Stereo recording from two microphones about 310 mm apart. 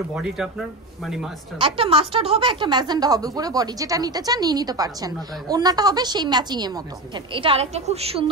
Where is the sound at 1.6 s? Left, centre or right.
Centre.